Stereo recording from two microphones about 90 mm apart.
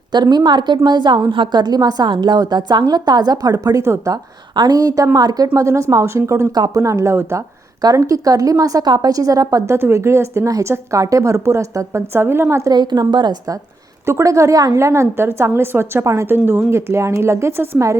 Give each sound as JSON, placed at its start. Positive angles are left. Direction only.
{"t": 0.1, "sound": "a woman's voice", "side_deg": -50}
{"t": 1.3, "sound": "a woman's voice", "side_deg": -70}
{"t": 1.6, "sound": "a woman's voice", "side_deg": -45}
{"t": 5.5, "sound": "a woman's voice", "side_deg": -35}
{"t": 6.5, "sound": "a woman's voice", "side_deg": -45}
{"t": 7.8, "sound": "a woman's voice", "side_deg": -40}
{"t": 9.7, "sound": "a woman's voice", "side_deg": -30}
{"t": 12.7, "sound": "a woman's voice", "side_deg": -55}
{"t": 14.0, "sound": "a woman's voice", "side_deg": -35}